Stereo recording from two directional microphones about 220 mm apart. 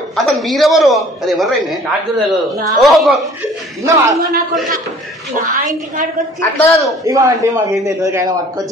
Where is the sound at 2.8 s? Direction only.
Centre (ahead or behind).